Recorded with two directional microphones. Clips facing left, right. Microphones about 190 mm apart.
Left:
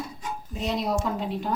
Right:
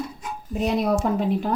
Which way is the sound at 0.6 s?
55° right (ahead or behind).